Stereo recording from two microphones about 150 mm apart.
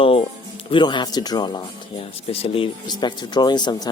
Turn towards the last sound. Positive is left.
turn(degrees=25)  # may be behind; listen again after turning